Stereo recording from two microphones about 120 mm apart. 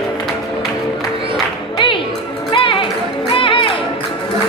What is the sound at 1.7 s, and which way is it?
Music, 45° left (ahead or behind).